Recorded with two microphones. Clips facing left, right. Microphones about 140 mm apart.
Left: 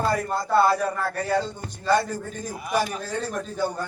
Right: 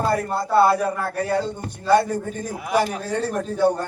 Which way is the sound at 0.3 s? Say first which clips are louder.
Right 3 dB; 5° right (ahead or behind).